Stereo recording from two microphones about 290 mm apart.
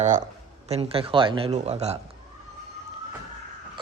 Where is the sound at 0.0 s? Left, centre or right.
Right.